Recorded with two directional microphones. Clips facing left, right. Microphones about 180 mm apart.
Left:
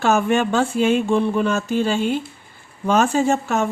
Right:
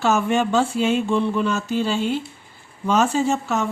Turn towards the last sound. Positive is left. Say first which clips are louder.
# left 2 dB
turn(degrees=55)  # may be behind; listen again after turning